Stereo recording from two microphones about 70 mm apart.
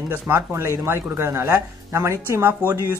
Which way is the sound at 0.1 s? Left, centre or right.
Right.